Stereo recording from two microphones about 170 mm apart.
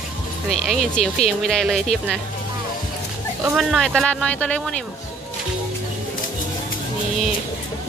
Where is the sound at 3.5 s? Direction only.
Centre (ahead or behind).